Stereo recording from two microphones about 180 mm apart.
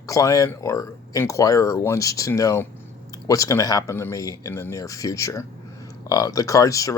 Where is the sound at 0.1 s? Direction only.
20° left (ahead or behind).